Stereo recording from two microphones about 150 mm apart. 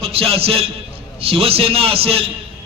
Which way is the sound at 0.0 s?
40° right (ahead or behind).